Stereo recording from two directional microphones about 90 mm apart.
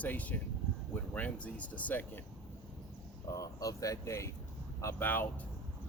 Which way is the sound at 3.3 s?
40° left (ahead or behind).